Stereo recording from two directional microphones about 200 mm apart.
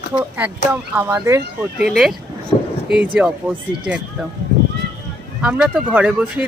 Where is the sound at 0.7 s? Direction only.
10° right (ahead or behind).